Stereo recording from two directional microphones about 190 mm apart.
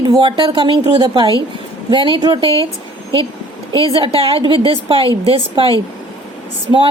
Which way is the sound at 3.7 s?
30° right (ahead or behind).